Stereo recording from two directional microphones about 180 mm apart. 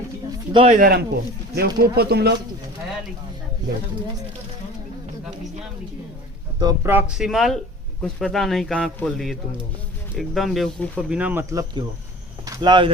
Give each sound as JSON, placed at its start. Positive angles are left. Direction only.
{"t": 0.3, "sound": "bird", "side_deg": -30}
{"t": 0.8, "sound": "speech", "side_deg": -55}
{"t": 6.6, "sound": "a man's voice", "side_deg": -20}
{"t": 11.1, "sound": "speech", "side_deg": -10}